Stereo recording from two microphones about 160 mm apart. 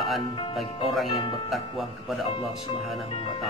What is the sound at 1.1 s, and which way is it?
Speech, 35° left (ahead or behind).